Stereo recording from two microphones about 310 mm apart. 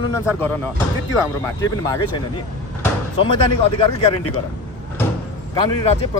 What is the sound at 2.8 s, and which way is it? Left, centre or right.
Speech, centre.